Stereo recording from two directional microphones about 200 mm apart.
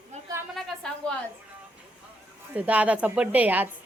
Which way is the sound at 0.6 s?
5° left (ahead or behind).